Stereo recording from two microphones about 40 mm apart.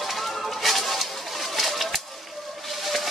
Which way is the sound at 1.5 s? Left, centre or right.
Centre.